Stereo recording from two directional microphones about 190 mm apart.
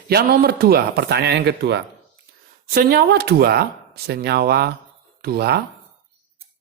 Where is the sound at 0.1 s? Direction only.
55° right (ahead or behind).